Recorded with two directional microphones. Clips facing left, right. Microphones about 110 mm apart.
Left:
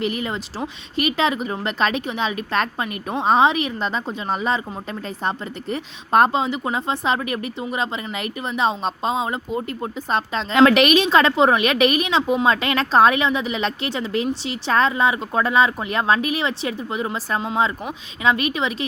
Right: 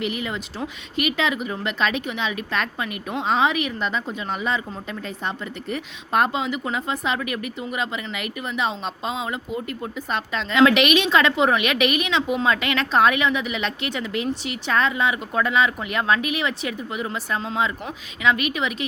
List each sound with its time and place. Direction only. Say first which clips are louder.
0.0 s a woman's voice: left 3 dB; 40° left (ahead or behind)